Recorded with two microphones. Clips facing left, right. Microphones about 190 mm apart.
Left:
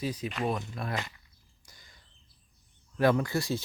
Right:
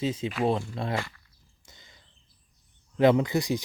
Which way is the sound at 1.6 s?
25° right (ahead or behind).